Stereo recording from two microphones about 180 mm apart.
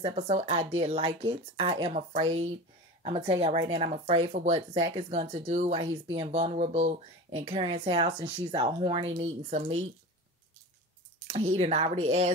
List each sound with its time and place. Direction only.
0.0 s speech: 35° right (ahead or behind)
9.2 s speech: 40° right (ahead or behind)
11.2 s speech: 35° right (ahead or behind)